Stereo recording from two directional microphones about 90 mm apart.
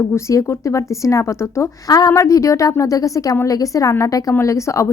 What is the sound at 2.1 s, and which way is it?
A woman's voice, 35° left (ahead or behind).